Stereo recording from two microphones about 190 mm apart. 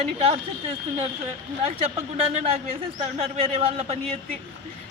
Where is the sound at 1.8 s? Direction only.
30° right (ahead or behind).